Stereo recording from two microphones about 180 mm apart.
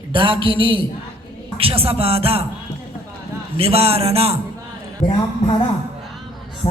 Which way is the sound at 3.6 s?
35° right (ahead or behind).